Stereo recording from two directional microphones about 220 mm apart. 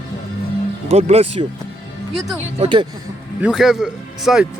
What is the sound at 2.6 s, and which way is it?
Speech, 20° right (ahead or behind).